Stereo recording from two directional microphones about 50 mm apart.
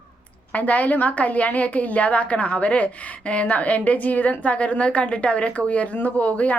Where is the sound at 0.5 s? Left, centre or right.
Left.